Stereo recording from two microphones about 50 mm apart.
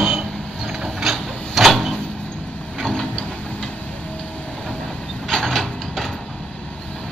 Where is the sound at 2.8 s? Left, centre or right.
Centre.